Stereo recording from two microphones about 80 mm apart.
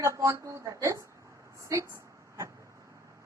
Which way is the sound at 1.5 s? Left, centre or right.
Right.